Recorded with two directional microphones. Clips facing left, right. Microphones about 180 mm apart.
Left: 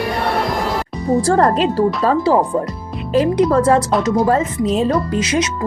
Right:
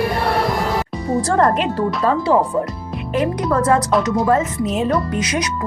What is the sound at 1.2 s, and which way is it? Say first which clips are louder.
A woman's voice: left 2 dB; 35° left (ahead or behind).